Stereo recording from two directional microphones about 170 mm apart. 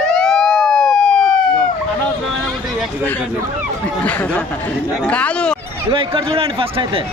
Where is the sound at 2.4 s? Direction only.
5° left (ahead or behind).